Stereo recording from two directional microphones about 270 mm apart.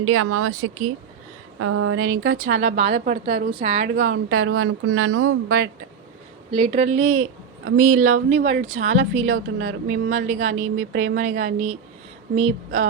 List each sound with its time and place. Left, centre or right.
0.0 s speech: right
2.6 s a woman's voice: right
3.9 s speech: right
6.5 s a woman's voice: right
6.9 s speech: right
8.1 s speech: right
8.6 s a woman's voice: right
9.2 s speech: right
9.6 s speech: right
10.2 s speech: right
11.2 s a woman's voice: right